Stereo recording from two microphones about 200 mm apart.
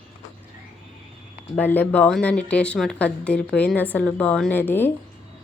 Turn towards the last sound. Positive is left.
turn(degrees=10)  # may be behind; listen again after turning